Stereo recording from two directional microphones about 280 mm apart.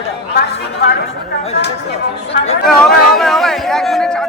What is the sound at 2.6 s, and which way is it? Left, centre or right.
Chatter, centre.